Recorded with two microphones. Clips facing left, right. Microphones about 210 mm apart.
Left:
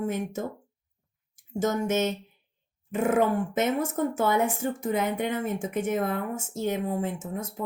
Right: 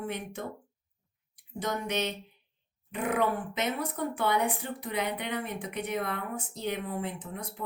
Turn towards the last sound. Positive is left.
turn(degrees=45)  # may be behind; listen again after turning